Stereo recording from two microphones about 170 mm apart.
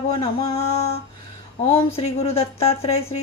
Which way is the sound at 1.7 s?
35° left (ahead or behind).